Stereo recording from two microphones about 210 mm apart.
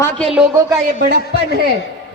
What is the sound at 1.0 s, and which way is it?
Speech, 50° right (ahead or behind).